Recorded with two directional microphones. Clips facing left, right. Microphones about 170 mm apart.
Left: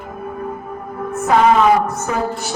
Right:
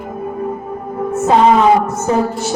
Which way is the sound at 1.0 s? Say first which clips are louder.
Right 3 dB; 25° right (ahead or behind).